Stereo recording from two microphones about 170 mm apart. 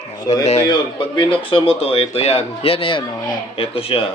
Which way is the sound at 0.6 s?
30° left (ahead or behind).